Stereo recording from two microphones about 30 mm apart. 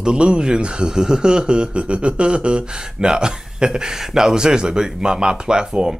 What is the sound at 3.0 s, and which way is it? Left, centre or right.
Speech, right.